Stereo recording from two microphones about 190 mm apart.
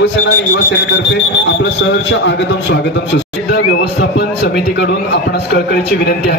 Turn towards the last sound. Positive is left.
turn(degrees=60)  # may be behind; listen again after turning